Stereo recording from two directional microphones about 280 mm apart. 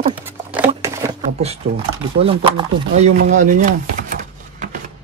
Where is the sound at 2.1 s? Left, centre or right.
Centre.